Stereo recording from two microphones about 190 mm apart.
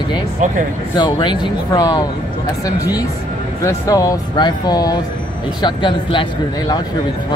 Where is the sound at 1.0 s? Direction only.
25° left (ahead or behind).